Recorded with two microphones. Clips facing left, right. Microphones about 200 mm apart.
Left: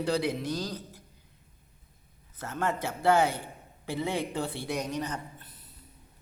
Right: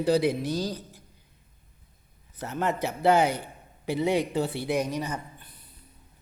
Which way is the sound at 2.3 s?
15° right (ahead or behind).